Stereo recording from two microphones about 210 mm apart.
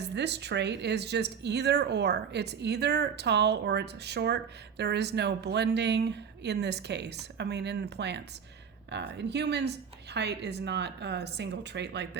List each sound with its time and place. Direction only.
0.0 s speech: 55° right (ahead or behind)